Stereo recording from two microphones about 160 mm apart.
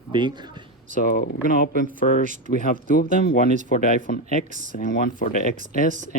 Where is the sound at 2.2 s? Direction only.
50° right (ahead or behind).